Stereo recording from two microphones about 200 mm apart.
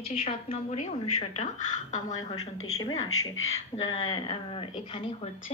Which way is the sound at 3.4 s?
85° left.